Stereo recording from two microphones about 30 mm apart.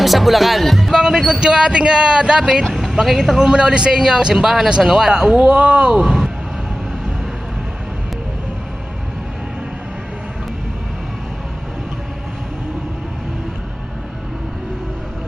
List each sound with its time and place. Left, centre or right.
0.0 s speech: centre
0.9 s speech: centre
1.4 s speech: right
2.7 s a man's voice: centre
3.5 s speech: right; by 5.1 s centre
5.1 s speech: right
5.5 s speech: right
6.0 s a sound: centre